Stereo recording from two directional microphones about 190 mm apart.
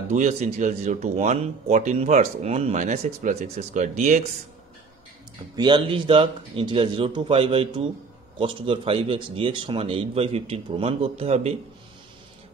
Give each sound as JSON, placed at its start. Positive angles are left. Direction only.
{"t": 0.1, "sound": "speech", "side_deg": -40}
{"t": 5.6, "sound": "a man's voice", "side_deg": -25}